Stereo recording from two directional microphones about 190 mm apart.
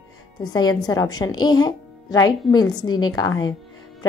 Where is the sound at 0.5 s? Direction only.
20° left (ahead or behind).